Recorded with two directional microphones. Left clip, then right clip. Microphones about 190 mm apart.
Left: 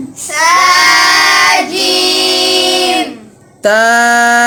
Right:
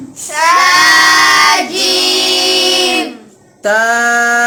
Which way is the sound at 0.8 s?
30° right (ahead or behind).